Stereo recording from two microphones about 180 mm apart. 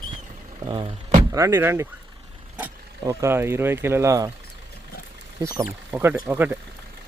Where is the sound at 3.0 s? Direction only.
15° right (ahead or behind).